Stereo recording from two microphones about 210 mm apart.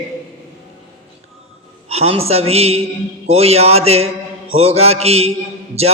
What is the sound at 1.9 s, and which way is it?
Speech, 30° right (ahead or behind).